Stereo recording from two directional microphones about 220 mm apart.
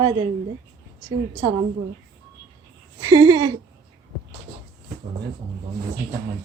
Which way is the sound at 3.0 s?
15° right (ahead or behind).